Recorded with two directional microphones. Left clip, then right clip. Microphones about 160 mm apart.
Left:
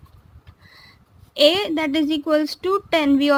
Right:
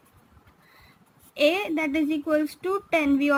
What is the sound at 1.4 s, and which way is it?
A woman's voice, 45° left (ahead or behind).